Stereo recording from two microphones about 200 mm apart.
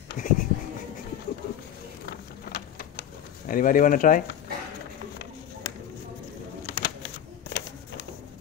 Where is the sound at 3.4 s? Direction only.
45° left (ahead or behind).